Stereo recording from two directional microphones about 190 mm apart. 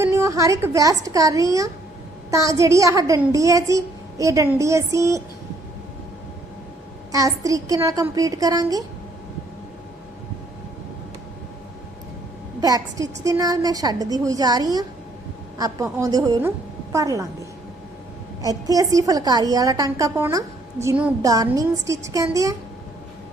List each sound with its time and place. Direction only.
0.0 s a woman's voice: 15° right (ahead or behind)
7.1 s a woman's voice: 20° right (ahead or behind)
12.5 s a woman's voice: 20° right (ahead or behind)
18.4 s a woman's voice: 20° right (ahead or behind)